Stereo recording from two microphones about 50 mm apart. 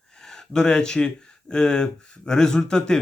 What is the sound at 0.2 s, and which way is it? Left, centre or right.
Speech, centre.